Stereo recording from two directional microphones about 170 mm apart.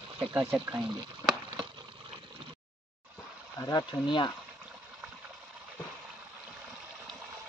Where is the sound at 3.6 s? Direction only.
25° left (ahead or behind).